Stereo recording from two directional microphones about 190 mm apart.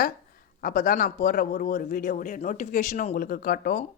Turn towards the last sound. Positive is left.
turn(degrees=50)  # may be behind; listen again after turning